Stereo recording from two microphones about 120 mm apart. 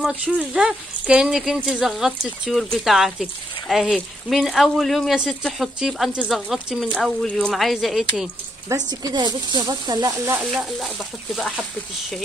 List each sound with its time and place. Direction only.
0.5 s speech: 10° right (ahead or behind)
8.6 s speech: 35° right (ahead or behind)
10.3 s speech: 5° right (ahead or behind)